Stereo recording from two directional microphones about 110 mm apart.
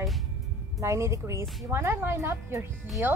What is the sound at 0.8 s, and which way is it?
A woman's voice, 25° right (ahead or behind).